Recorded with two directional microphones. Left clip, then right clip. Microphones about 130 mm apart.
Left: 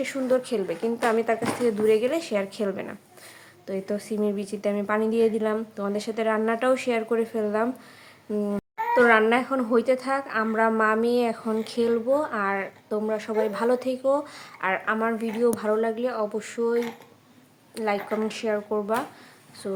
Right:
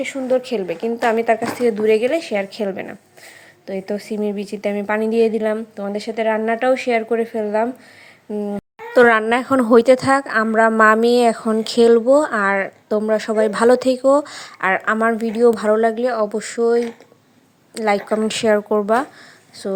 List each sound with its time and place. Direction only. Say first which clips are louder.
0.0 s a woman's voice: right 5 dB; 25° right (ahead or behind)
8.3 s speech: right 3 dB; 20° right (ahead or behind)
8.9 s a woman's voice: right 6 dB; 90° right; by 16.8 s 60° right (ahead or behind)
17.7 s a woman's voice: right 8 dB; 70° right (ahead or behind)
19.6 s speech: right 7 dB; 60° right (ahead or behind)